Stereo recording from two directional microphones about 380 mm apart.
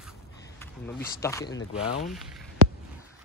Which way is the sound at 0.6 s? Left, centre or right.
Centre.